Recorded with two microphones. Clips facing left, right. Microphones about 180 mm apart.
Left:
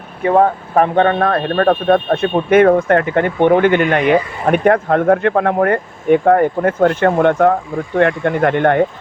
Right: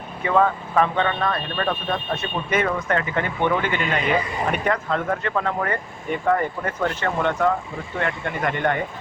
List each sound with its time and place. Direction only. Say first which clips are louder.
0.3 s speech: left 7 dB; 45° left (ahead or behind)